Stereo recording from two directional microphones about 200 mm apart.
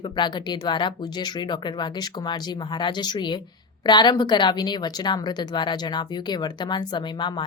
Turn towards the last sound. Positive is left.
turn(degrees=25)  # may be behind; listen again after turning